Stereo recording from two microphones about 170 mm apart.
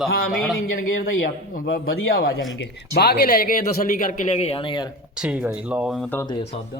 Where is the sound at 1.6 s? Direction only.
75° left (ahead or behind).